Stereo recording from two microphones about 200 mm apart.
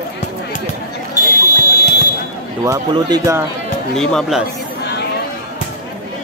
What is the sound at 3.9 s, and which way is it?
Speech, centre (ahead or behind).